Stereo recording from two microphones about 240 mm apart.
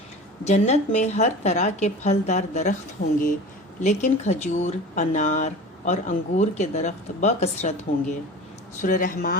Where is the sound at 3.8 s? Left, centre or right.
Left.